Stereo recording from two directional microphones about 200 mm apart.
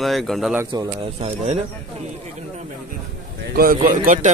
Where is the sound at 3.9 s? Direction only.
40° right (ahead or behind).